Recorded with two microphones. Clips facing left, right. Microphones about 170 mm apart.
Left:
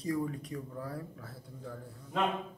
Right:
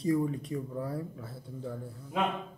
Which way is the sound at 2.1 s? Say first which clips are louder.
Right 1 dB; 10° right (ahead or behind).